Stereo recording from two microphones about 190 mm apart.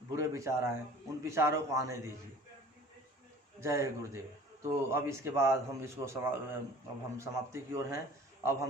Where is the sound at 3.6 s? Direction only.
15° right (ahead or behind).